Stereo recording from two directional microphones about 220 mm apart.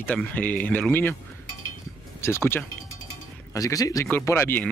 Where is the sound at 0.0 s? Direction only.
5° left (ahead or behind).